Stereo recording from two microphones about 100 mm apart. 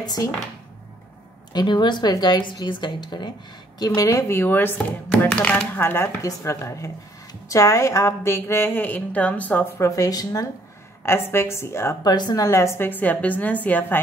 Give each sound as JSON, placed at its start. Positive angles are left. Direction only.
{"t": 0.0, "sound": "speech", "side_deg": 40}
{"t": 1.5, "sound": "a woman's voice", "side_deg": 50}
{"t": 3.8, "sound": "a woman's voice", "side_deg": 35}
{"t": 5.8, "sound": "speech", "side_deg": 25}
{"t": 9.8, "sound": "speech", "side_deg": 35}
{"t": 11.1, "sound": "speech", "side_deg": 25}
{"t": 12.0, "sound": "speech", "side_deg": 45}
{"t": 12.4, "sound": "a woman's voice", "side_deg": 25}